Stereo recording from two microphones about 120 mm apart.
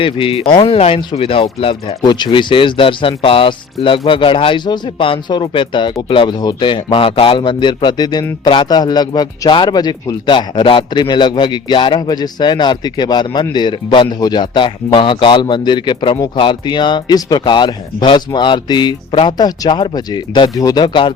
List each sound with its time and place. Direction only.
0.0 s speech: 50° left (ahead or behind)
2.0 s a man's voice: 40° left (ahead or behind)